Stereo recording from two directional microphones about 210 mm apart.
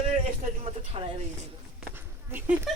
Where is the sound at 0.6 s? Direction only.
25° right (ahead or behind).